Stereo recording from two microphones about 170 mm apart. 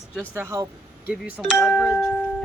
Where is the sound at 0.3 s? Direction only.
15° right (ahead or behind).